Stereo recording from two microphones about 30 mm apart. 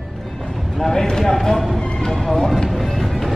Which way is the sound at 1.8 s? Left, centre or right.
Left.